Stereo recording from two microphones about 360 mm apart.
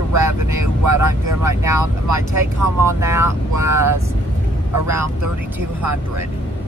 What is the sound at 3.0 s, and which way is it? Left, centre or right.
Speech, centre.